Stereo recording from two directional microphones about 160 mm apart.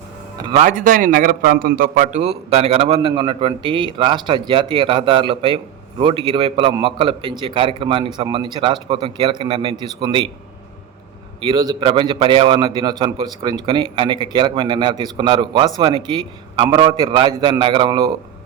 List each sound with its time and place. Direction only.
0.6 s a man's voice: 55° right (ahead or behind); by 10.3 s 30° right (ahead or behind)
11.3 s a man's voice: 30° right (ahead or behind)